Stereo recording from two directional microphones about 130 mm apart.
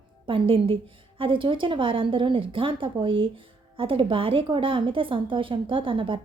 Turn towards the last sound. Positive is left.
turn(degrees=-40)  # may be behind; listen again after turning